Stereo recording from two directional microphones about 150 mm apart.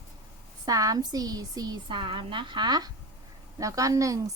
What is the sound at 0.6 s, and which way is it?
A woman's voice, 25° right (ahead or behind).